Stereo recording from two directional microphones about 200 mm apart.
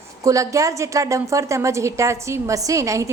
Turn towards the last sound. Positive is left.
turn(degrees=-15)  # may be behind; listen again after turning